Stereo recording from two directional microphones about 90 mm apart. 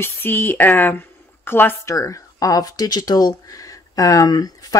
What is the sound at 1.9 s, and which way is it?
Speech, 35° left (ahead or behind).